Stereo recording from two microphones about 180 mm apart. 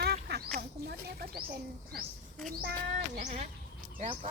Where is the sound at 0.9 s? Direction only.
60° right (ahead or behind).